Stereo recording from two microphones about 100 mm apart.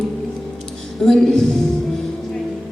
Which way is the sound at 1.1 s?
5° left (ahead or behind).